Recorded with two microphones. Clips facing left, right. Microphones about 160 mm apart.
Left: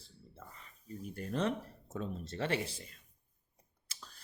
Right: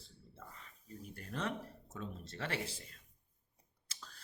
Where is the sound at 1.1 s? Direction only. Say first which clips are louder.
Left 6 dB; 25° left (ahead or behind).